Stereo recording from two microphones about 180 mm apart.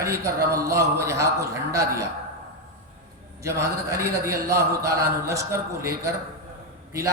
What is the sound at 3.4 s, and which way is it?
A man's voice, 15° right (ahead or behind).